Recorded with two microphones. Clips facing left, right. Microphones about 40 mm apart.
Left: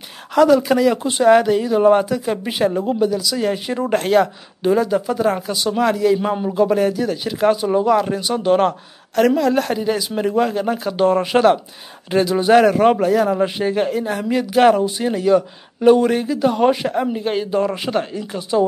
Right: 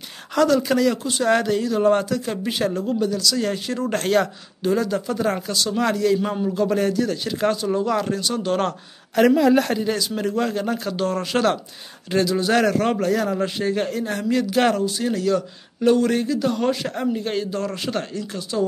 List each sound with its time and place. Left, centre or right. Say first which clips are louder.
0.3 s speech: left 5 dB; centre
6.1 s speech: left 4 dB; centre
9.1 s speech: even; centre
14.8 s speech: left 3 dB; left